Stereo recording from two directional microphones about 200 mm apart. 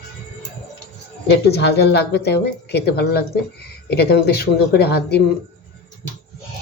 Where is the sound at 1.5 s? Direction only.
55° left (ahead or behind).